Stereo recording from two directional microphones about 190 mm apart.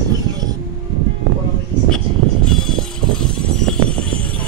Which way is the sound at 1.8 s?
5° left (ahead or behind).